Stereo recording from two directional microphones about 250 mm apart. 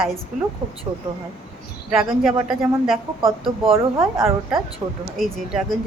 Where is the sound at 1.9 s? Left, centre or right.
Centre.